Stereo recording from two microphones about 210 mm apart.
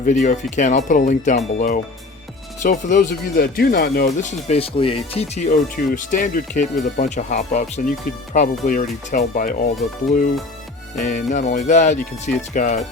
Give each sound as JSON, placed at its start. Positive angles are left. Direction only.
{"t": 0.0, "sound": "speech", "side_deg": 35}
{"t": 4.2, "sound": "speech", "side_deg": 35}
{"t": 5.5, "sound": "speech", "side_deg": 40}
{"t": 11.0, "sound": "speech", "side_deg": 35}